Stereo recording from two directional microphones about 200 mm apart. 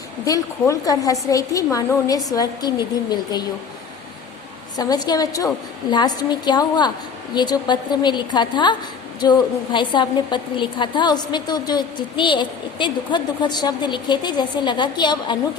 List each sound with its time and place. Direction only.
0.6 s a woman's voice: 15° left (ahead or behind)
4.8 s a woman's voice: 20° left (ahead or behind)